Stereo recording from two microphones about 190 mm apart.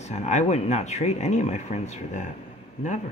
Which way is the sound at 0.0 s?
35° left (ahead or behind).